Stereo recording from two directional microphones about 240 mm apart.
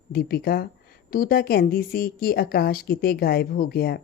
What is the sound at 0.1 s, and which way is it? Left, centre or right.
A woman's voice, left.